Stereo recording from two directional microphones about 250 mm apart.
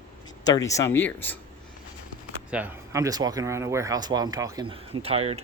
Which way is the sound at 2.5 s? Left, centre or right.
Centre.